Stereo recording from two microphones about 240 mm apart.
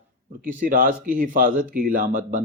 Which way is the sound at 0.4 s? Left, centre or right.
Right.